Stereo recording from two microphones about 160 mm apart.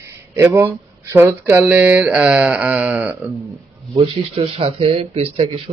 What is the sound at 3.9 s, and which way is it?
Speech, 35° right (ahead or behind).